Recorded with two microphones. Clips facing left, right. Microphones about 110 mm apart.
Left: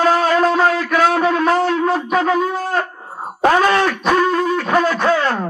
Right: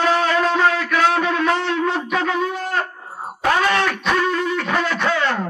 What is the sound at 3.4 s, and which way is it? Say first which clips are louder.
Wail: left 4 dB; 40° left (ahead or behind).